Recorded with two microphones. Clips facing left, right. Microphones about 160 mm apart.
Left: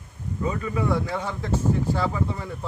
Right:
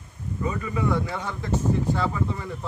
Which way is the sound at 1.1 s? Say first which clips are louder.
Left 1 dB; 5° left (ahead or behind).